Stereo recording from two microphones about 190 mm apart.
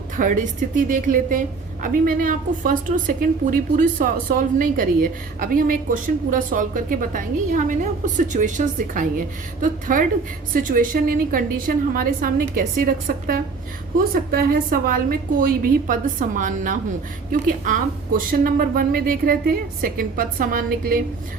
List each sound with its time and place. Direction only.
0.2 s a woman's voice: 40° right (ahead or behind)